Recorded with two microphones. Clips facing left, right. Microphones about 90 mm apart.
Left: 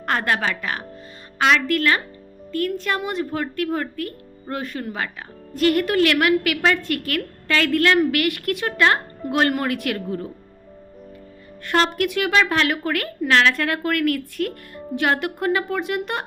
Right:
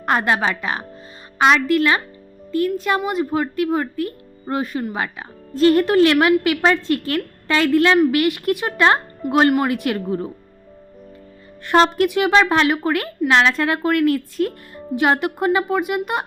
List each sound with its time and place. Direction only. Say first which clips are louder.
0.0 s a woman's voice: right 3 dB; 20° right (ahead or behind)
5.5 s a woman's voice: right 5 dB; 25° right (ahead or behind)
9.2 s speech: right 5 dB; 5° right (ahead or behind)
9.6 s a woman's voice: right 3 dB; 20° right (ahead or behind)
11.7 s a woman's voice: right 5 dB; 25° right (ahead or behind)